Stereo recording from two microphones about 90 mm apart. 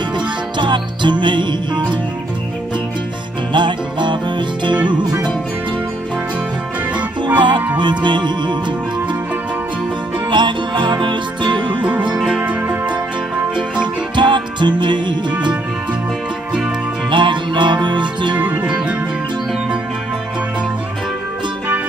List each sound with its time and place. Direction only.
0.6 s music: 60° right (ahead or behind)
3.5 s music: 60° right (ahead or behind)
6.9 s music: 15° right (ahead or behind)
7.3 s music: 60° right (ahead or behind)
10.3 s music: 60° right (ahead or behind)
12.2 s music: 5° right (ahead or behind)
14.1 s music: 60° right (ahead or behind)
17.1 s music: 60° right (ahead or behind)
18.6 s music: 10° right (ahead or behind)